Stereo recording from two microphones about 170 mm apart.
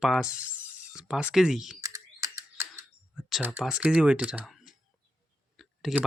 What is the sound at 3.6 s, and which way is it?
Speech, 5° right (ahead or behind).